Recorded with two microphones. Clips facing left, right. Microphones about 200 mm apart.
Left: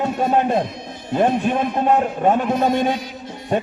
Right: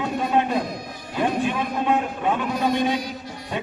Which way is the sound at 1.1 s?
50° left (ahead or behind).